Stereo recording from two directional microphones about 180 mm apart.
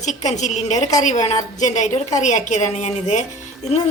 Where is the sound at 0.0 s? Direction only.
40° left (ahead or behind).